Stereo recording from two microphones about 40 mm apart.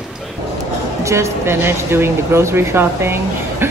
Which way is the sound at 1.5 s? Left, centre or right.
Right.